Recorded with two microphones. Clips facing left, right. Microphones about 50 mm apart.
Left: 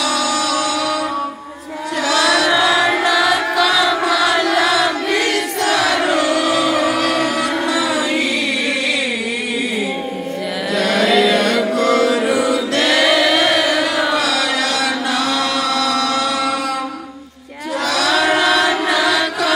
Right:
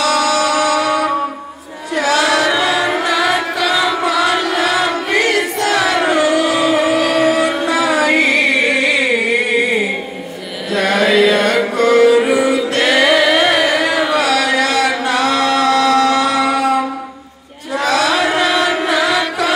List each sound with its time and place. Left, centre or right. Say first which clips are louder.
0.0 s music: right 4 dB; right
5.9 s music: right 2 dB; right
7.0 s a sound: right 4 dB; centre
7.3 s music: right 3 dB; right
10.8 s chant: right 2 dB; right
11.8 s music: right 7 dB; right
12.7 s a sound: right 2 dB; right
17.7 s chant: right 2 dB; right